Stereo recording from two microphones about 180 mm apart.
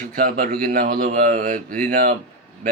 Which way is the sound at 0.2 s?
50° right (ahead or behind).